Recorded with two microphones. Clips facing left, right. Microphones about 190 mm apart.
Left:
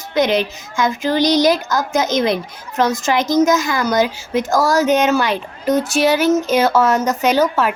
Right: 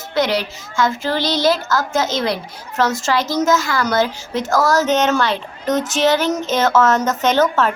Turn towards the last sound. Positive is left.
turn(degrees=10)  # may be behind; listen again after turning